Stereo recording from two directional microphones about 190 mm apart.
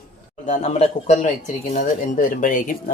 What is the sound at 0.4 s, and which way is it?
Speech, 40° left (ahead or behind).